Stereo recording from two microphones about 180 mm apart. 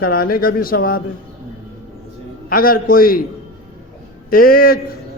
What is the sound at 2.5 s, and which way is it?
Speech, 55° left (ahead or behind).